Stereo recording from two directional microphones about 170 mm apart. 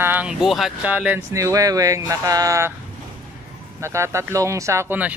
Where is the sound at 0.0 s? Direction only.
10° right (ahead or behind).